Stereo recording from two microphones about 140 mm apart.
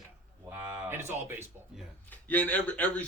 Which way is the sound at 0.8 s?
15° right (ahead or behind).